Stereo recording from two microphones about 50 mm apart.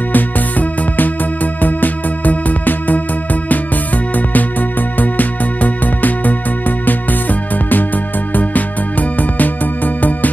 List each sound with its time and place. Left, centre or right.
0.1 s music: left